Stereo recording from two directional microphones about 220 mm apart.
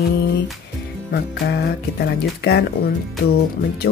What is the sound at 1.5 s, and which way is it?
Speech, 50° left (ahead or behind).